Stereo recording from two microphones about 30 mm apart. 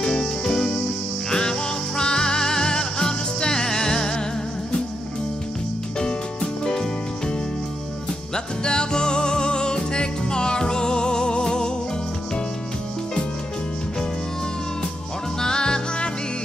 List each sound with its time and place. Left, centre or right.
0.0 s music: left
5.9 s music: left
8.6 s music: left
15.4 s music: left